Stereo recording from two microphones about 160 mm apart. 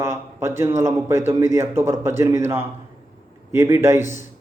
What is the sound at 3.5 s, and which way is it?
Speech, 15° right (ahead or behind).